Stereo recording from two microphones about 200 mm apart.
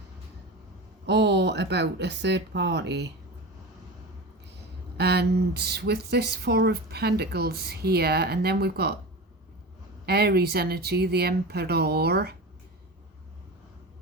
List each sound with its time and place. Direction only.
1.0 s speech: 60° right (ahead or behind)
4.9 s speech: 55° right (ahead or behind)
10.1 s speech: 50° right (ahead or behind)